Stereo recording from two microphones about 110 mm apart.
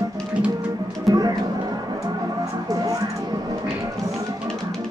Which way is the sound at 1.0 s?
35° right (ahead or behind).